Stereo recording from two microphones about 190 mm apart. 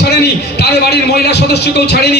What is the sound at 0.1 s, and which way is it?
A man's voice, 60° left (ahead or behind).